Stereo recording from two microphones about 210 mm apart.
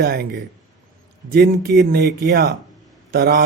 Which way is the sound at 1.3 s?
50° right (ahead or behind).